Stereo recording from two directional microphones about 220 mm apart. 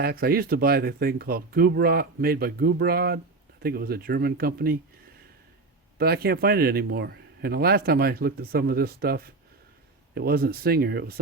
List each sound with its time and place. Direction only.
0.0 s a man's voice: 45° right (ahead or behind)
6.0 s a man's voice: 45° right (ahead or behind)